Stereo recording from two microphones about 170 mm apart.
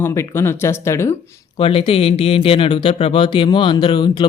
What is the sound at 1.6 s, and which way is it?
Speech, 30° left (ahead or behind).